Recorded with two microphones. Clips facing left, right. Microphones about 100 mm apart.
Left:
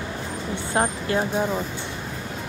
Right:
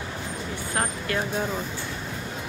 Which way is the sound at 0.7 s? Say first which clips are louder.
Left 5 dB; 25° left (ahead or behind).